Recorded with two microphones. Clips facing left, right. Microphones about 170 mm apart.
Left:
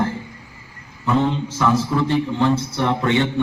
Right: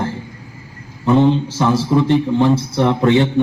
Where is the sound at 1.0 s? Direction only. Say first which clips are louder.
Right 6 dB; 25° right (ahead or behind).